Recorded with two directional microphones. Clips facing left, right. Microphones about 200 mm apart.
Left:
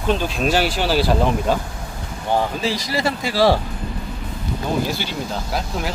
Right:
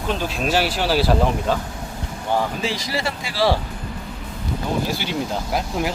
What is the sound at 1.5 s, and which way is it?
Speech, 10° left (ahead or behind).